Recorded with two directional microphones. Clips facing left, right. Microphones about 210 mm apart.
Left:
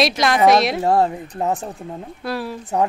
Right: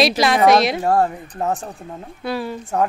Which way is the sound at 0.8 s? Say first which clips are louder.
Left 1 dB; 20° left (ahead or behind).